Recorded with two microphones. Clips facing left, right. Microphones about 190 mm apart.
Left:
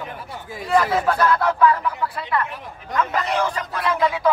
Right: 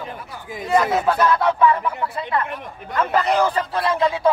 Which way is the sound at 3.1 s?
35° right (ahead or behind).